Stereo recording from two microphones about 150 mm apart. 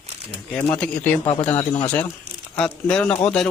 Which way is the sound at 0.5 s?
10° left (ahead or behind).